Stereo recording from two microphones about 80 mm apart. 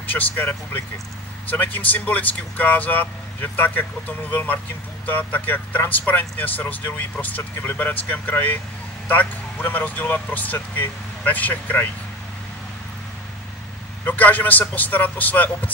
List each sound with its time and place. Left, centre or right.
1.5 s speech: left
5.0 s speech: left
14.0 s speech: left